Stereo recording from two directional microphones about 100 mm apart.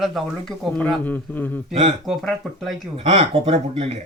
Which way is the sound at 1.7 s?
90° right.